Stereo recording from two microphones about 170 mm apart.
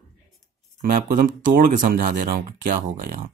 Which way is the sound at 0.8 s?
55° right (ahead or behind).